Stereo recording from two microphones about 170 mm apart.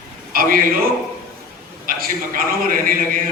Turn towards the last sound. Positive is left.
turn(degrees=-55)  # may be behind; listen again after turning